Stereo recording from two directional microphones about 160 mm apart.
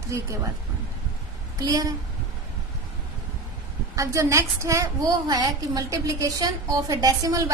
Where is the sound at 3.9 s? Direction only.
20° right (ahead or behind).